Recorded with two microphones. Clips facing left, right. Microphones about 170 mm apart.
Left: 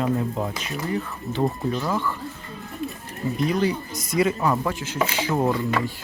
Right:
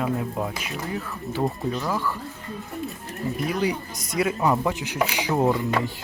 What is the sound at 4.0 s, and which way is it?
Speech, centre (ahead or behind).